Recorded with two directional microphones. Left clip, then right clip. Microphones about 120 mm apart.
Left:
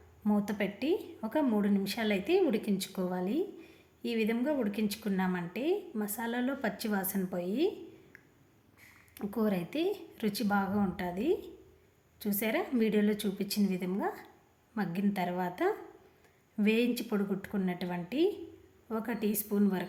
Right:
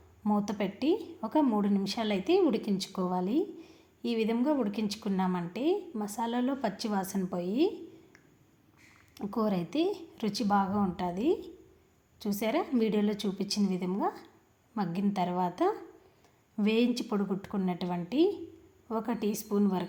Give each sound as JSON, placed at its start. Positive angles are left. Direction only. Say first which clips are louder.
{"t": 0.3, "sound": "a woman's voice", "louder": "right 1 dB", "side_deg": -20}
{"t": 9.1, "sound": "a woman's voice", "louder": "right 2 dB", "side_deg": -15}